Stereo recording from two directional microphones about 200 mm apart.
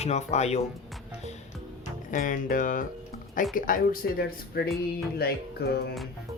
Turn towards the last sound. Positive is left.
turn(degrees=50)  # may be behind; listen again after turning